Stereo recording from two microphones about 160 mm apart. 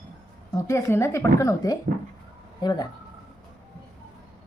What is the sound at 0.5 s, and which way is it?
A woman's voice, 15° left (ahead or behind).